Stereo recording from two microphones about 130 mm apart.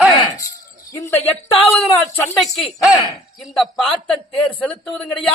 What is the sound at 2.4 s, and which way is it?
Speech, centre (ahead or behind).